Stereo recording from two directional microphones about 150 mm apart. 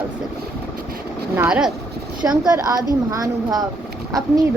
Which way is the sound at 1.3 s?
15° right (ahead or behind).